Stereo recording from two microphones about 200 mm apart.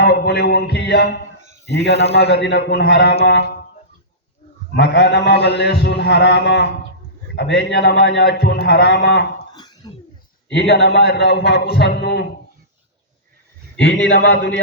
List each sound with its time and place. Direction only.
0.0 s a sound: 55° left (ahead or behind)
1.6 s a man's voice: 60° left (ahead or behind)
4.8 s a man's voice: 60° left (ahead or behind)
9.6 s cough: 20° left (ahead or behind)
10.5 s a man's voice: 55° left (ahead or behind)
13.7 s a man's voice: 60° left (ahead or behind)